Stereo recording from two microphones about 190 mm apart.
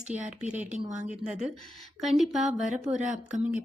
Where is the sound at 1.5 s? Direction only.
Centre (ahead or behind).